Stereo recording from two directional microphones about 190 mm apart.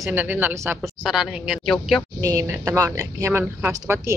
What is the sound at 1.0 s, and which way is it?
Speech, 5° right (ahead or behind).